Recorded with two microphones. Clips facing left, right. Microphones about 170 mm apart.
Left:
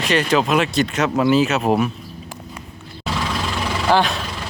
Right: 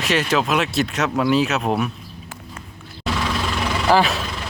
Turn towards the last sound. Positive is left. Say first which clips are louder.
# even
turn(degrees=0)  # may be behind; listen again after turning